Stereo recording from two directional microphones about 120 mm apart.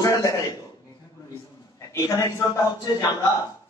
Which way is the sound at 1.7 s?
25° left (ahead or behind).